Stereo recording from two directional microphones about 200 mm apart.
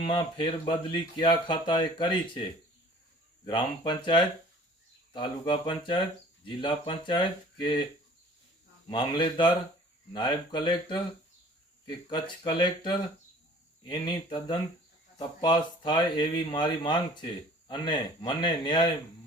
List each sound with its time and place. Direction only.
0.0 s speech: 25° left (ahead or behind)
3.4 s speech: 25° left (ahead or behind)
8.9 s speech: 25° left (ahead or behind)